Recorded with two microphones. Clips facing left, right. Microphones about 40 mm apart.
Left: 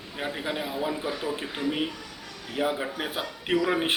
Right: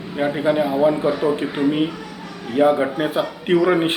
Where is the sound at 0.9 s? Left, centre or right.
Right.